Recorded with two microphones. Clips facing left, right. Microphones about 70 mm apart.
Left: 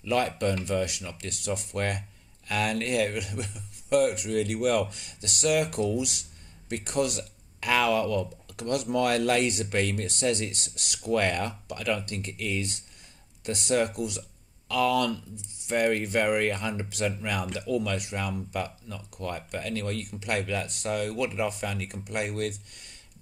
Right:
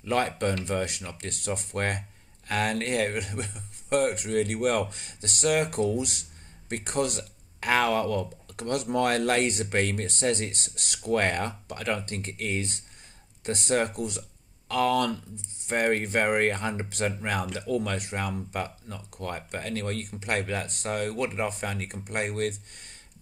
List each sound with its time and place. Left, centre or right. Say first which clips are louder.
0.0 s speech: even; right